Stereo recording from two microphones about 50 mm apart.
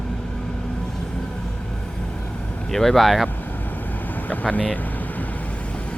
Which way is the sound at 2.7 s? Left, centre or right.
Centre.